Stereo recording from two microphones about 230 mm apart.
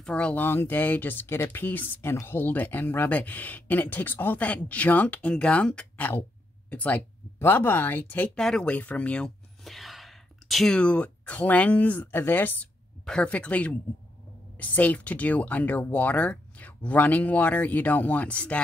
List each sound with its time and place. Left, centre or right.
0.0 s speech: centre